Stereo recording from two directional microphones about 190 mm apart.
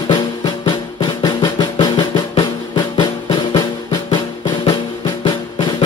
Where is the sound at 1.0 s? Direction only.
25° left (ahead or behind).